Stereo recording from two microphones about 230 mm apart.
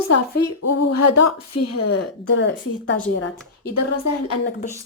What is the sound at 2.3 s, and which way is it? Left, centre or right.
Speech, left.